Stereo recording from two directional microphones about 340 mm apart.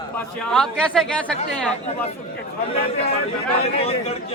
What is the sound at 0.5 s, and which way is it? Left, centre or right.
Speech, centre.